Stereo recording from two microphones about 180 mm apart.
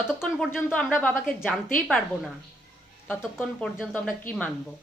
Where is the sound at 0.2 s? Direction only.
5° left (ahead or behind).